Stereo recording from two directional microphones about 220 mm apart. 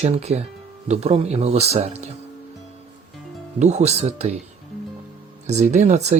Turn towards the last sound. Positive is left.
turn(degrees=-30)  # may be behind; listen again after turning